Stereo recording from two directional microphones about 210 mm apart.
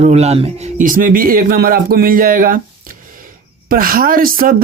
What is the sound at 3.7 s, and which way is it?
Speech, 45° right (ahead or behind).